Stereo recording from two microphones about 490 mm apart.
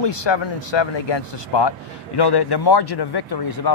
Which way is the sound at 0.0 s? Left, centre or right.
Left.